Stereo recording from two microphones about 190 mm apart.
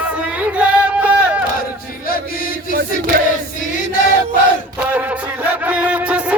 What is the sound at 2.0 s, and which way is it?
Chant, 50° left (ahead or behind).